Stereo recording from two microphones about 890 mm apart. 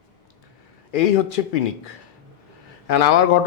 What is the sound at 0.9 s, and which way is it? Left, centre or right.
A man's voice, left.